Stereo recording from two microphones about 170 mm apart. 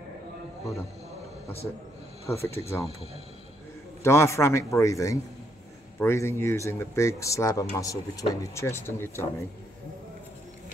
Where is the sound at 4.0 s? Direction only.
15° left (ahead or behind).